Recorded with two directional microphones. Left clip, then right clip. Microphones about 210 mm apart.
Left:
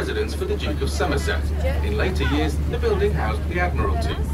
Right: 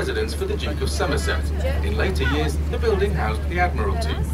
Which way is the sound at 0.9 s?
50° right (ahead or behind).